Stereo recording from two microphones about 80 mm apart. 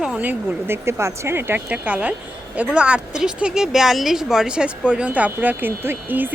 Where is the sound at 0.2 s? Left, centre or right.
Right.